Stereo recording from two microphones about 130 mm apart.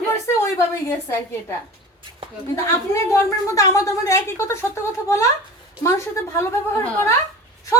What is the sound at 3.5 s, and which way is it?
A woman's voice, 25° left (ahead or behind).